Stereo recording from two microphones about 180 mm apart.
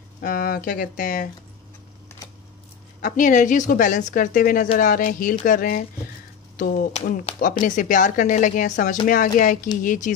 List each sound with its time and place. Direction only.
0.2 s a woman's voice: 55° left (ahead or behind)
3.0 s a woman's voice: 45° left (ahead or behind)